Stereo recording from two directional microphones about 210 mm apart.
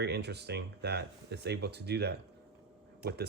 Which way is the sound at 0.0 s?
55° right (ahead or behind).